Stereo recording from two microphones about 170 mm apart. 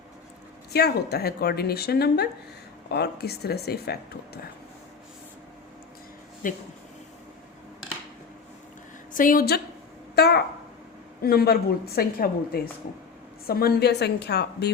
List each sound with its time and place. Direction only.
0.7 s a woman's voice: 70° left (ahead or behind)
6.4 s a woman's voice: 55° left (ahead or behind)
9.1 s a woman's voice: 55° left (ahead or behind)
10.2 s a woman's voice: 70° left (ahead or behind)